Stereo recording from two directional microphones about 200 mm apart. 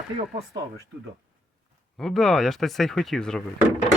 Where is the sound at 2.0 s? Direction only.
Centre (ahead or behind).